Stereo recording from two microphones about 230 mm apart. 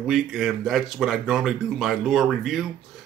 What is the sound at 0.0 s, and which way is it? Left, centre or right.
Speech, centre.